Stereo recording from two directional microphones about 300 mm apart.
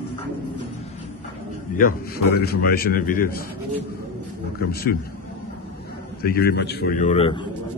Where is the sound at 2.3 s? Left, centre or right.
Left.